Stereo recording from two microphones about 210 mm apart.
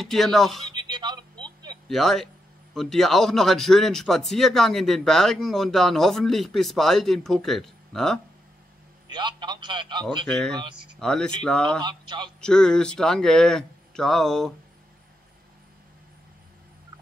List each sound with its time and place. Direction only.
0.0 s speech: centre (ahead or behind)
0.7 s a sound: 20° right (ahead or behind)
1.9 s speech: centre (ahead or behind)
9.1 s a man's voice: 20° right (ahead or behind)
10.2 s speech: 5° left (ahead or behind)
11.8 s a man's voice: 20° right (ahead or behind)
12.4 s speech: 5° left (ahead or behind)